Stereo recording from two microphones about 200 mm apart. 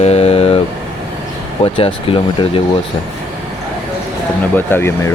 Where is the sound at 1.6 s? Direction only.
30° left (ahead or behind).